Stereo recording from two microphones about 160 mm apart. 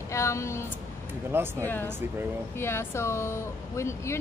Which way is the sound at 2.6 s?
15° left (ahead or behind).